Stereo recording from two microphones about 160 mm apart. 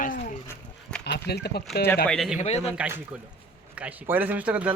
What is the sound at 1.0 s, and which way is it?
Speech, 90° left.